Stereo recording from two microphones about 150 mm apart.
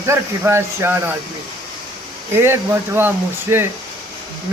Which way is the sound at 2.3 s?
15° right (ahead or behind).